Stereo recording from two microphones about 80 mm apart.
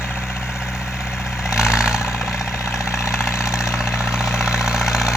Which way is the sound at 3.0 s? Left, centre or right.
Left.